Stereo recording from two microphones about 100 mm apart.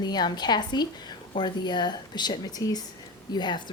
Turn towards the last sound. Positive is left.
turn(degrees=45)  # may be behind; listen again after turning